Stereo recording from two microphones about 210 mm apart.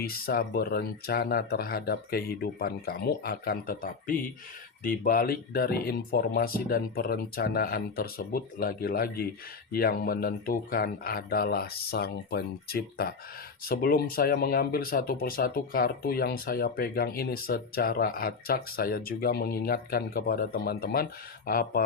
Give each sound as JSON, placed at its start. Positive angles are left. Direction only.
{"t": 0.0, "sound": "speech", "side_deg": 45}